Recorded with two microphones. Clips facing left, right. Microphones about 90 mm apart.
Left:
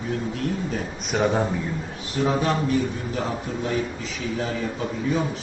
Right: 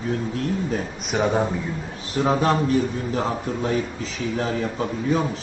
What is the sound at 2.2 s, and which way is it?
A man's voice, 35° right (ahead or behind).